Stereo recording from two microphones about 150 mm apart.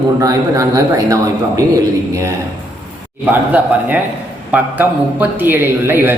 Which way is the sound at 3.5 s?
10° right (ahead or behind).